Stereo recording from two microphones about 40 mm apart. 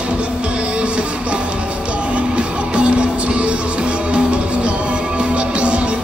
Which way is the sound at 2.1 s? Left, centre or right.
Right.